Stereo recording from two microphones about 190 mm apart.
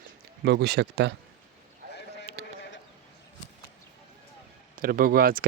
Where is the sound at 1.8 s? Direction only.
55° right (ahead or behind).